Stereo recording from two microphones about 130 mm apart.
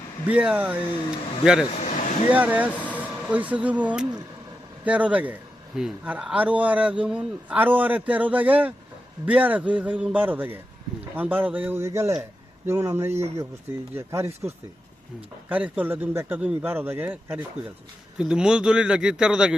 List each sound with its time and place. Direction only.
0.3 s a man's voice: 10° right (ahead or behind)
1.8 s a sound: 70° left (ahead or behind)
2.3 s a man's voice: 10° right (ahead or behind)
2.7 s vehicle: 10° left (ahead or behind)
3.0 s a man's voice: 10° right (ahead or behind)